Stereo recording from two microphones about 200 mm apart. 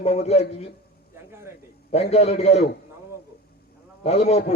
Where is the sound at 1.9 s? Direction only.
30° left (ahead or behind).